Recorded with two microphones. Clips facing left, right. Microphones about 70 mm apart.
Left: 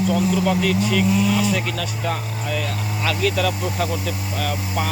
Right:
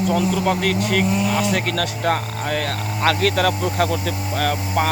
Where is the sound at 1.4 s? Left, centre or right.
Right.